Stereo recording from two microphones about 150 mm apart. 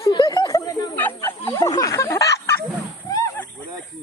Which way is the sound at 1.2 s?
20° left (ahead or behind).